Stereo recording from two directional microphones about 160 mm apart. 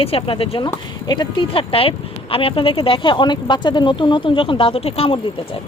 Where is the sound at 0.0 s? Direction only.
35° left (ahead or behind).